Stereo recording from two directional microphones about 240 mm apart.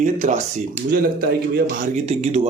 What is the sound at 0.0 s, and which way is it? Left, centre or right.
A man's voice, right.